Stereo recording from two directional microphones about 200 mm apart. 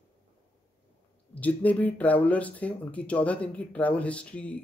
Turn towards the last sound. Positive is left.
turn(degrees=5)  # may be behind; listen again after turning